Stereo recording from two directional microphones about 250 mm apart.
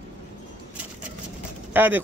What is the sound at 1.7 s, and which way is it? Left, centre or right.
Speech, centre.